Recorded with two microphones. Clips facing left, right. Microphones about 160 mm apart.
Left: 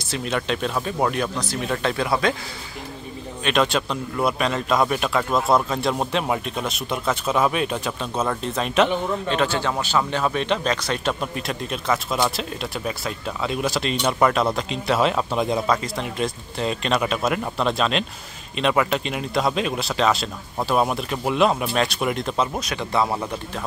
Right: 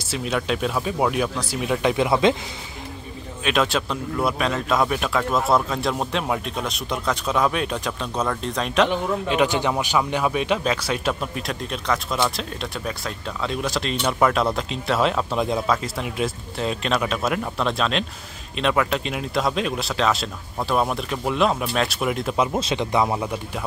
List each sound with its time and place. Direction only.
0.1 s speech: 5° right (ahead or behind); by 2.3 s 20° right (ahead or behind)
3.4 s a man's voice: centre (ahead or behind)
22.5 s speech: 25° right (ahead or behind)